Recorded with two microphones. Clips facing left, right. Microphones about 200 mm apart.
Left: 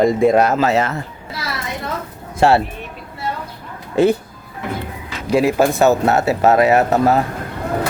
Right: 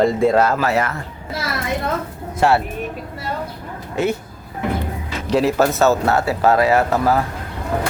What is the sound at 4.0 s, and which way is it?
Speech, 30° left (ahead or behind).